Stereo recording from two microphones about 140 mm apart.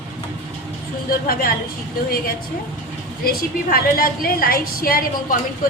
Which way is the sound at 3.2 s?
90° left.